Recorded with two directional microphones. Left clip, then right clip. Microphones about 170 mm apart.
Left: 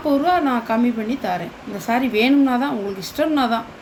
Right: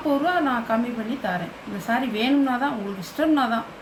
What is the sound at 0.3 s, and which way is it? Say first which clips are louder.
A woman's voice: left 4 dB; 50° left (ahead or behind).